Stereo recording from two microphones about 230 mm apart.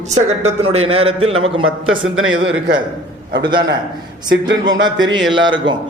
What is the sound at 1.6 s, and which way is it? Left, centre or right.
A man's voice, right.